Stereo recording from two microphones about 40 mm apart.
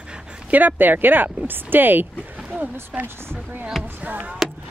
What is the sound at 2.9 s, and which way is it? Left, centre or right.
Speech, centre.